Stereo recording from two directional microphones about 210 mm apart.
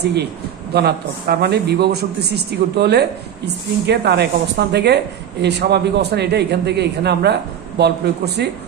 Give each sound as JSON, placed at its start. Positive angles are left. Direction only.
{"t": 0.0, "sound": "speech", "side_deg": -50}